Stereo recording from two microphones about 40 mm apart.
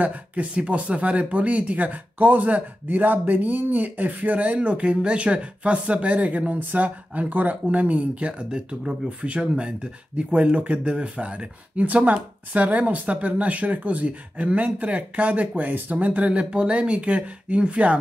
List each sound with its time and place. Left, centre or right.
0.0 s speech: right
8.5 s speech: centre